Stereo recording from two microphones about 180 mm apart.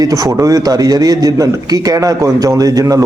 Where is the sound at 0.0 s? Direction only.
20° right (ahead or behind).